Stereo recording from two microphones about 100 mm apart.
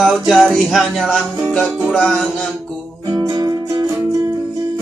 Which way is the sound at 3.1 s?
40° right (ahead or behind).